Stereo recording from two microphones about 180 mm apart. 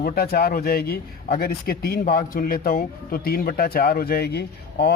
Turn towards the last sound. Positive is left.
turn(degrees=65)  # may be behind; listen again after turning